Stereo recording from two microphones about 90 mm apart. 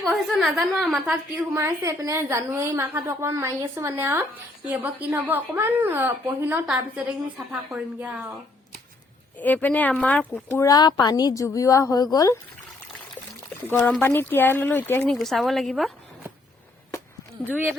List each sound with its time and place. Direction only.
0.0 s a woman's voice: 5° right (ahead or behind)
1.5 s a woman's voice: 35° right (ahead or behind)
6.7 s a woman's voice: 5° right (ahead or behind)
7.9 s speech: 20° right (ahead or behind)
9.4 s speech: 20° left (ahead or behind)
10.6 s a woman's voice: 45° left (ahead or behind)
13.7 s speech: 20° left (ahead or behind)
15.1 s a woman's voice: 5° left (ahead or behind)